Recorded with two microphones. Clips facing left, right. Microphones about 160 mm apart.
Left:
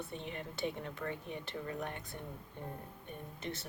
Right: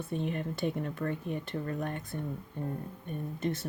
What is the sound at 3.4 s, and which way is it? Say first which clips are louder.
Speech: right 10 dB; 50° right (ahead or behind).